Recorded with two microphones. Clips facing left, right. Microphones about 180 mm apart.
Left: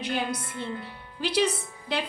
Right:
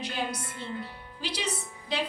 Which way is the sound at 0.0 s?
55° left (ahead or behind).